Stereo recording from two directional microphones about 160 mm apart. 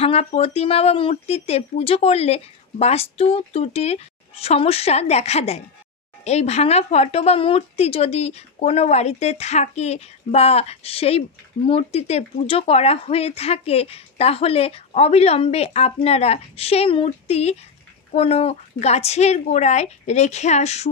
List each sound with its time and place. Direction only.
0.0 s a woman's voice: 40° left (ahead or behind)